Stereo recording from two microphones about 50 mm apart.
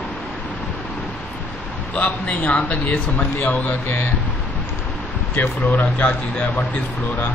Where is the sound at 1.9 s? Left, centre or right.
Left.